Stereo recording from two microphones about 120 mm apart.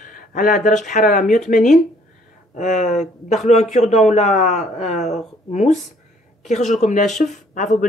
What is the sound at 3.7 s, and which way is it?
Speech, 70° left (ahead or behind).